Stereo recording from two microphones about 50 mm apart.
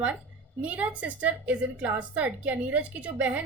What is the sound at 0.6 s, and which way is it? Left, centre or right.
A woman's voice, right.